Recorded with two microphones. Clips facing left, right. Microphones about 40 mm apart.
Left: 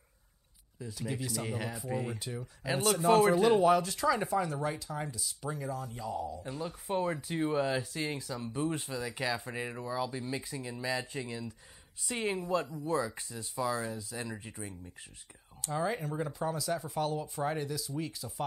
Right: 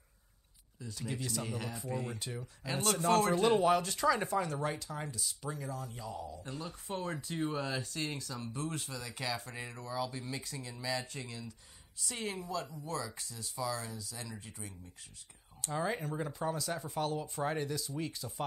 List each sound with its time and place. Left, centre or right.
0.7 s speech: centre; by 14.7 s left
15.6 s speech: centre